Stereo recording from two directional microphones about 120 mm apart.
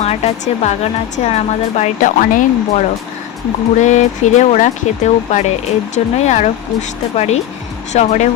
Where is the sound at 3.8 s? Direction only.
85° left.